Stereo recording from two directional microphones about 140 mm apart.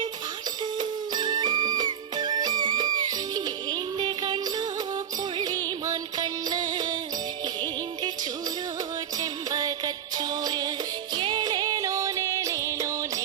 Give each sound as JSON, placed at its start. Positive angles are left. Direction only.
{"t": 0.6, "sound": "music", "side_deg": -30}
{"t": 5.9, "sound": "music", "side_deg": -30}